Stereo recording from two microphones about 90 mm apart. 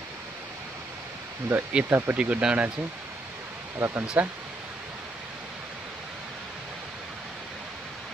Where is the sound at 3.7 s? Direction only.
25° right (ahead or behind).